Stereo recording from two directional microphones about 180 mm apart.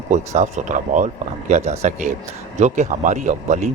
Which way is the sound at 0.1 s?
40° right (ahead or behind).